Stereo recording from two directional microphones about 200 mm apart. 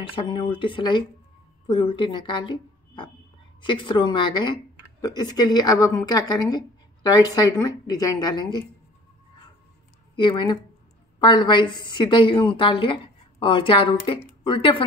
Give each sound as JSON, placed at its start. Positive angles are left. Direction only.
{"t": 0.1, "sound": "a woman's voice", "side_deg": 25}
{"t": 10.1, "sound": "a woman's voice", "side_deg": 25}